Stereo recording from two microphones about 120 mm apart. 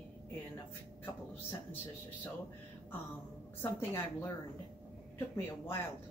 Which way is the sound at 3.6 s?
20° left (ahead or behind).